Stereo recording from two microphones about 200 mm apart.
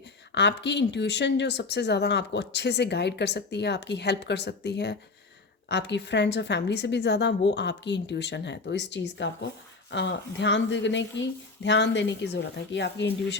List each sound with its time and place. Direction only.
0.3 s speech: 60° left (ahead or behind)